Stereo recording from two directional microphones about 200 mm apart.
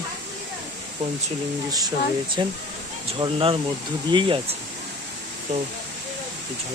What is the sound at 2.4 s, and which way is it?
Speech, 20° right (ahead or behind).